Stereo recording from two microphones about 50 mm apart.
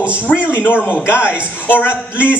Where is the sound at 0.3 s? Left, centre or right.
Left.